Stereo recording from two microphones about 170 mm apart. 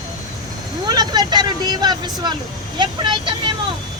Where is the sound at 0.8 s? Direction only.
25° right (ahead or behind).